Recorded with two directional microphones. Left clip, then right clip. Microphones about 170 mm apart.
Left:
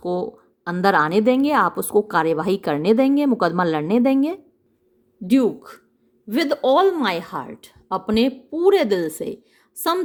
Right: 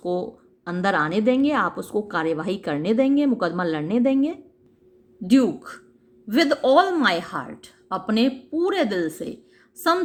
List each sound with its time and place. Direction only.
0.0 s a woman's voice: 25° left (ahead or behind)